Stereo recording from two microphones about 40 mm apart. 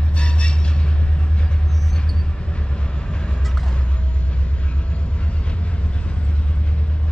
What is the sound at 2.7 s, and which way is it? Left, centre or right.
Vehicle, left.